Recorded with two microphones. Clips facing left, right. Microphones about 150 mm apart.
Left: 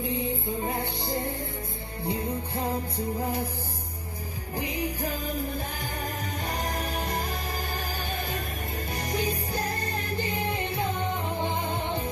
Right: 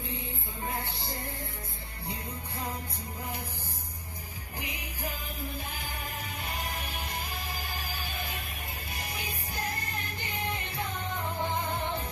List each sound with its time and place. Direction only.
0.1 s music: 25° left (ahead or behind)
4.6 s music: 35° left (ahead or behind)
6.4 s music: 40° left (ahead or behind); by 12.0 s 25° left (ahead or behind)